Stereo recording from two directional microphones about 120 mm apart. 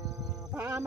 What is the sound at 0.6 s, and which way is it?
Music, 15° right (ahead or behind).